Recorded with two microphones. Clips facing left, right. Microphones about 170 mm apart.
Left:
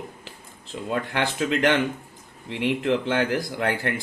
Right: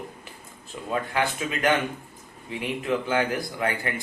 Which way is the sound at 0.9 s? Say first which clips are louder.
Even; 75° left (ahead or behind).